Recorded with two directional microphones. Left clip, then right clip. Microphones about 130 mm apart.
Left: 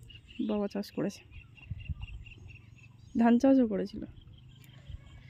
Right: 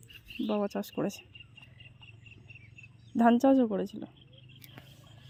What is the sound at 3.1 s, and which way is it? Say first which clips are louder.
Speech: right 1 dB; 10° left (ahead or behind).